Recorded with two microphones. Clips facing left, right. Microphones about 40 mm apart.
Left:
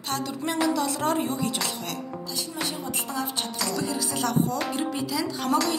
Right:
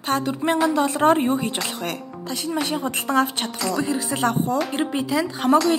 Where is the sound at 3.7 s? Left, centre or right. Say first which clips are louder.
Right 5 dB; right.